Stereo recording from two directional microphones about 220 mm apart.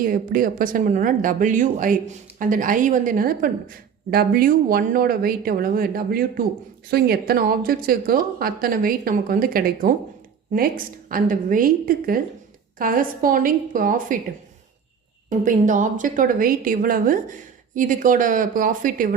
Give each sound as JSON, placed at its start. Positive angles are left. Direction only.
{"t": 0.0, "sound": "a woman's voice", "side_deg": -40}
{"t": 15.3, "sound": "a woman's voice", "side_deg": -35}